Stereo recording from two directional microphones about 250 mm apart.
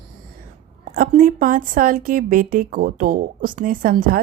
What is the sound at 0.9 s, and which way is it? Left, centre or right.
Speech, right.